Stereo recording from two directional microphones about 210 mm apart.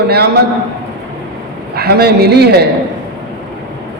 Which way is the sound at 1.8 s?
50° right (ahead or behind).